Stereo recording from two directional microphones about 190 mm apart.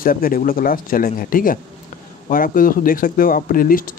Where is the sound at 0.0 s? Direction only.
50° left (ahead or behind).